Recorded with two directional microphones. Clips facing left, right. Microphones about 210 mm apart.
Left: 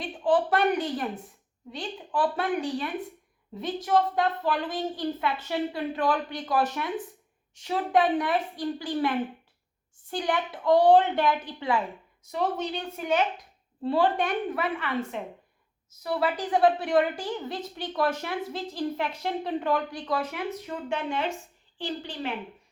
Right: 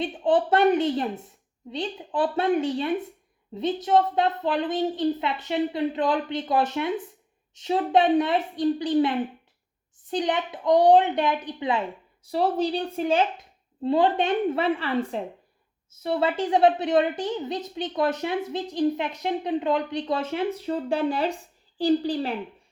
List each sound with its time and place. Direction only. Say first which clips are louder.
0.0 s a woman's voice: right 2 dB; 25° right (ahead or behind)
12.2 s a woman's voice: right 5 dB; 35° right (ahead or behind)
13.8 s a woman's voice: right 3 dB; 20° right (ahead or behind); by 22.4 s 35° right (ahead or behind)